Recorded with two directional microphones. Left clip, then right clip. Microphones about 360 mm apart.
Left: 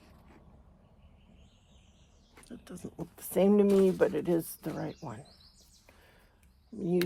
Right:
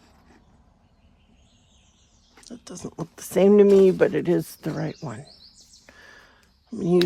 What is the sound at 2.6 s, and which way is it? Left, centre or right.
Speech, centre.